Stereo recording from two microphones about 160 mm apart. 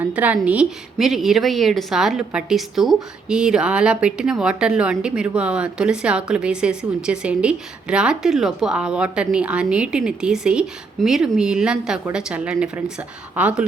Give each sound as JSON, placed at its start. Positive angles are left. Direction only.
{"t": 0.0, "sound": "a woman's voice", "side_deg": -10}